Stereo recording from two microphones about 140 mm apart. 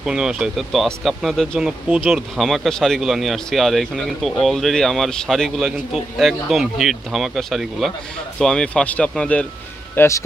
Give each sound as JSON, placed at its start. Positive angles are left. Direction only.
{"t": 0.0, "sound": "speech", "side_deg": -5}
{"t": 1.9, "sound": "speech", "side_deg": -10}
{"t": 2.3, "sound": "speech", "side_deg": 0}
{"t": 9.9, "sound": "speech", "side_deg": 20}